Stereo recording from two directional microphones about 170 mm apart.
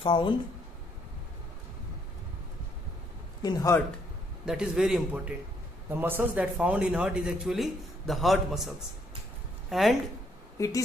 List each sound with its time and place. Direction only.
0.0 s a man's voice: 25° left (ahead or behind)
3.4 s a man's voice: 20° left (ahead or behind)
4.5 s a man's voice: 5° right (ahead or behind)
9.7 s a woman's voice: centre (ahead or behind)